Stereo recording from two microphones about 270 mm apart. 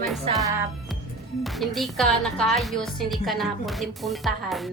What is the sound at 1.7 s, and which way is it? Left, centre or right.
Speech, centre.